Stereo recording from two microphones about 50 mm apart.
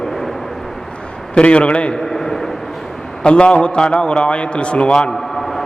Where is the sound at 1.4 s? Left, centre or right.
Left.